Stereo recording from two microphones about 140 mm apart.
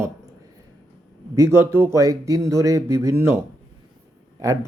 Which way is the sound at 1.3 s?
20° right (ahead or behind).